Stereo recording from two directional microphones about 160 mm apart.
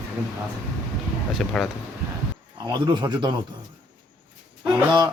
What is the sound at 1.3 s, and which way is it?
Speech, centre (ahead or behind).